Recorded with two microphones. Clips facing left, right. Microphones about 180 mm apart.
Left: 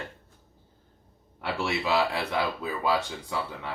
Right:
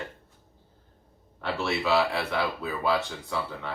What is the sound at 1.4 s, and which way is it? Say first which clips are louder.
Speech: right 1 dB; 15° left (ahead or behind).